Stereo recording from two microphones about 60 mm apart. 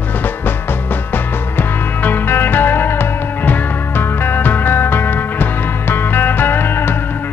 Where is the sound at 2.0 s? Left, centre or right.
Left.